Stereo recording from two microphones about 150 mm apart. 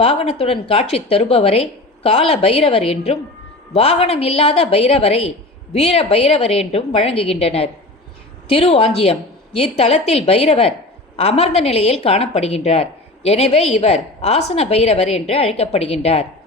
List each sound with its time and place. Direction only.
0.0 s a woman's voice: 40° left (ahead or behind)